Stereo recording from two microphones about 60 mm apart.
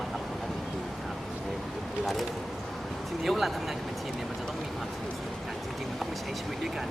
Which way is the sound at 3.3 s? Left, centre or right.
Centre.